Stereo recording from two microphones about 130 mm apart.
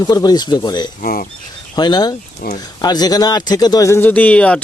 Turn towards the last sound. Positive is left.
turn(degrees=10)  # may be behind; listen again after turning